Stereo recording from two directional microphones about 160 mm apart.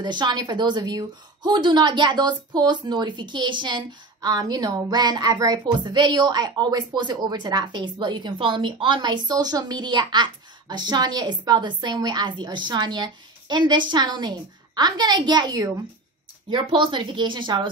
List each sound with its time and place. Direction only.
0.0 s a woman's voice: 30° right (ahead or behind)